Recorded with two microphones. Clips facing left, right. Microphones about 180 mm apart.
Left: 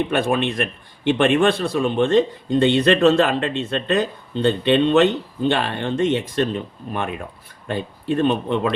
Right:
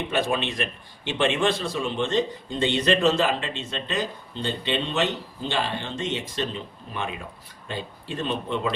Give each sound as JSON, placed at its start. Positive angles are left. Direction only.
{"t": 0.1, "sound": "speech", "side_deg": 55}